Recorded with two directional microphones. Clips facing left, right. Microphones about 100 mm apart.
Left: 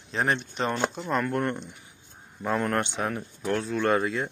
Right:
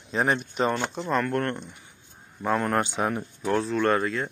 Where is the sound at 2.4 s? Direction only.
Centre (ahead or behind).